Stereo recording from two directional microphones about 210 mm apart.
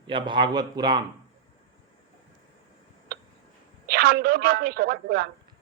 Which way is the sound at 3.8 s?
45° right (ahead or behind).